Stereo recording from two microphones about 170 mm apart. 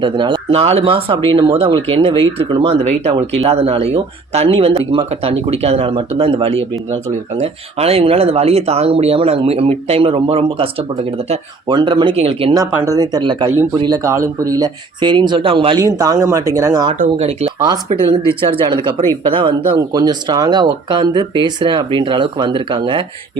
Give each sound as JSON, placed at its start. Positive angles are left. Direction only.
{"t": 0.0, "sound": "speech", "side_deg": -30}
{"t": 12.7, "sound": "speech", "side_deg": -20}
{"t": 17.0, "sound": "speech", "side_deg": -40}
{"t": 18.6, "sound": "speech", "side_deg": -25}